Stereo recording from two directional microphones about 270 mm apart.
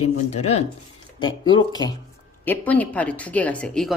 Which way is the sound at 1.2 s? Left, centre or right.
Centre.